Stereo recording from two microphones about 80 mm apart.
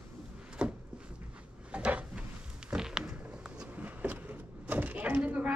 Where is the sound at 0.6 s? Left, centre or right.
Centre.